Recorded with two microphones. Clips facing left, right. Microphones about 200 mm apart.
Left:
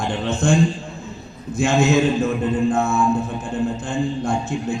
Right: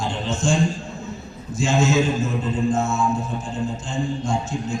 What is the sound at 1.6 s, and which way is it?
A man's voice, 60° left (ahead or behind).